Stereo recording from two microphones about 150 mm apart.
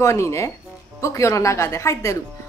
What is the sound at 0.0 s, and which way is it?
Speech, 20° left (ahead or behind).